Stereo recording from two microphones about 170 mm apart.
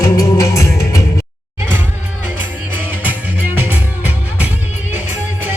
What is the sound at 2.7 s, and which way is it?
Music, 10° right (ahead or behind).